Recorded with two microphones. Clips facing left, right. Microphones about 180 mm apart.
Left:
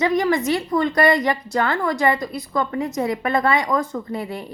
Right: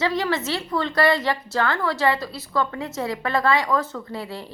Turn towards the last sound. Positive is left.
turn(degrees=20)  # may be behind; listen again after turning